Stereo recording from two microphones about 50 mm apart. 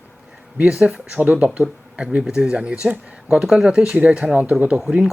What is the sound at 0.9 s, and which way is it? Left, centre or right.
Speech, right.